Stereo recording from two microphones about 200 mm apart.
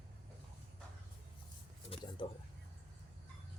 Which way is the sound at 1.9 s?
30° left (ahead or behind).